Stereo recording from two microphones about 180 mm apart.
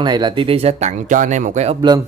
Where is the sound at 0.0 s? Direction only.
25° right (ahead or behind).